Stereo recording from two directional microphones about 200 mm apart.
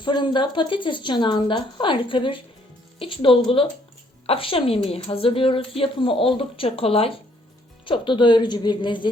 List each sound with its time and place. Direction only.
0.0 s a woman's voice: 25° left (ahead or behind)